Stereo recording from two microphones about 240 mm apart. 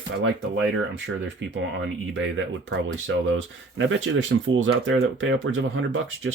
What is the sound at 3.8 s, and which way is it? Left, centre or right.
Speech, right.